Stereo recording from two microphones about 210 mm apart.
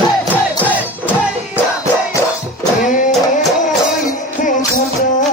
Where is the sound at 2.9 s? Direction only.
40° left (ahead or behind).